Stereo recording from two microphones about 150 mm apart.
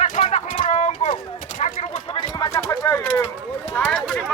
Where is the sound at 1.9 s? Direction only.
30° left (ahead or behind).